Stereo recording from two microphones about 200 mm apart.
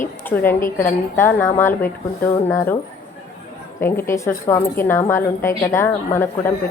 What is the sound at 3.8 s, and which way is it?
A woman's voice, 10° left (ahead or behind).